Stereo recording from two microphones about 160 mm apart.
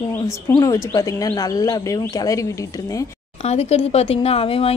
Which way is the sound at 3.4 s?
40° left (ahead or behind).